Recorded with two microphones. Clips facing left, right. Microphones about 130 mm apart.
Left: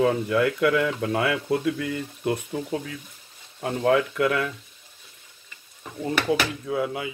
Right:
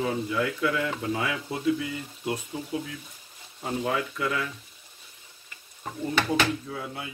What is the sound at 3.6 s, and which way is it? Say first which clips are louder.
Speech: left 7 dB; 70° left (ahead or behind).